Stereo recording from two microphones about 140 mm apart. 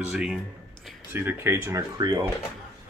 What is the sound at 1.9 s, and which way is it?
Speech, 30° right (ahead or behind).